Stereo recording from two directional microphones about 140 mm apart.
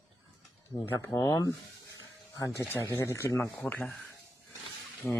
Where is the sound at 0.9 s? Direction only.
20° left (ahead or behind).